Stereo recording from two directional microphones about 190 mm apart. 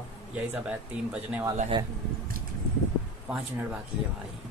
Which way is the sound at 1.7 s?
25° right (ahead or behind).